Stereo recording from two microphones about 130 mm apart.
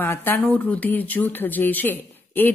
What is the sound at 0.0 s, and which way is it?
Speech, 15° left (ahead or behind).